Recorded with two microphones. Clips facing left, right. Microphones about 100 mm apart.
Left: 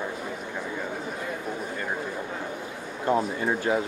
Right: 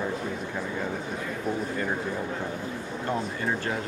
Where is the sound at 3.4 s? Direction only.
10° left (ahead or behind).